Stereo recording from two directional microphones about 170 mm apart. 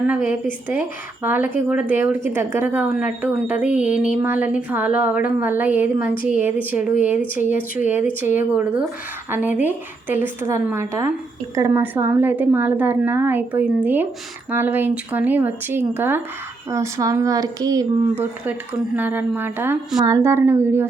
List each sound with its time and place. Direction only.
0.0 s speech: 10° right (ahead or behind)